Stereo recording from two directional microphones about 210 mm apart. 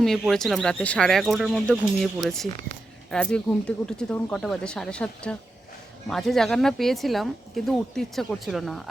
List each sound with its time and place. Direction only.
0.0 s speech: centre (ahead or behind)